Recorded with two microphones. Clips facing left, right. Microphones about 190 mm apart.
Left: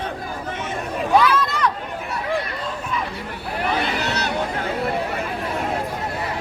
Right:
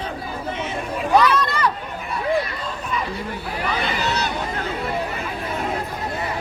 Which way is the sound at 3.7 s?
65° left (ahead or behind).